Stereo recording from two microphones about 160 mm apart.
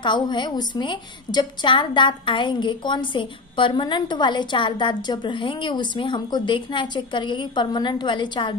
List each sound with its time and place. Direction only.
0.0 s a woman's voice: 30° left (ahead or behind)